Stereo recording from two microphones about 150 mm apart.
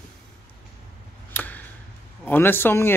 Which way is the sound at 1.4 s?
10° left (ahead or behind).